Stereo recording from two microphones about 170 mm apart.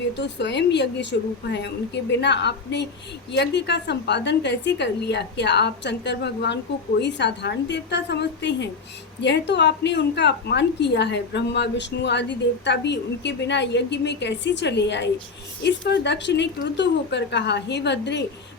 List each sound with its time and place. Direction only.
0.2 s a woman's voice: 90° left